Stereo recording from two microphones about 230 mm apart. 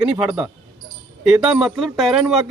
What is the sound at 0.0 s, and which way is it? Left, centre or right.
Speech, centre.